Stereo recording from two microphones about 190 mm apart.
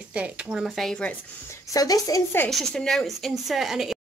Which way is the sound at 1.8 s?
20° left (ahead or behind).